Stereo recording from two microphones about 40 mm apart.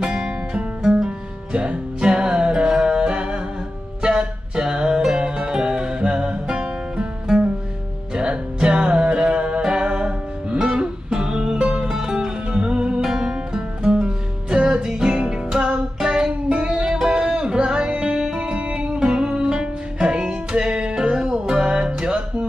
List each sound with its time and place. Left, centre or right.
0.0 s music: right
0.8 s music: centre
1.5 s music: right
16.3 s music: right; by 18.5 s centre
18.5 s music: right